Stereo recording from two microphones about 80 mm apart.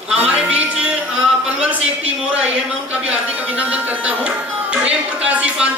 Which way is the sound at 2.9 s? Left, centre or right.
Centre.